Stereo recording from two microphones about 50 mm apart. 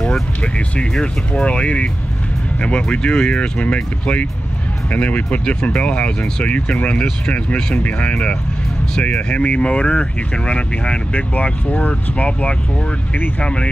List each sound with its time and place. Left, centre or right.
0.0 s speech: left